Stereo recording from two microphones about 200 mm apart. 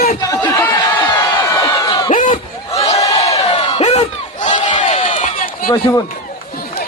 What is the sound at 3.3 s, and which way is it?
Battle cry, 30° left (ahead or behind).